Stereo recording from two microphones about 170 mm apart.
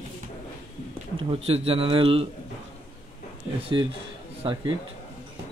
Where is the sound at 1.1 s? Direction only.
35° right (ahead or behind).